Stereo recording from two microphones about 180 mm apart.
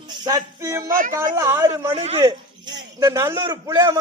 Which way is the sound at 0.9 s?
50° right (ahead or behind).